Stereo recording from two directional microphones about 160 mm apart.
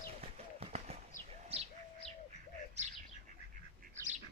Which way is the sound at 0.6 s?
40° right (ahead or behind).